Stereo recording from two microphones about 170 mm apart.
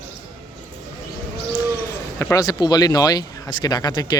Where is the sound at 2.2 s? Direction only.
15° left (ahead or behind).